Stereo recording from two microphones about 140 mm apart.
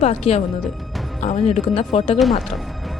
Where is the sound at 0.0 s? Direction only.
50° left (ahead or behind).